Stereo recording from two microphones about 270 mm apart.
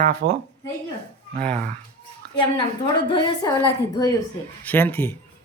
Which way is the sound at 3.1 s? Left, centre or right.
Centre.